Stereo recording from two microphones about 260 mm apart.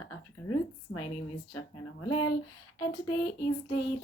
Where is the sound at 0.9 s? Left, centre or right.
Left.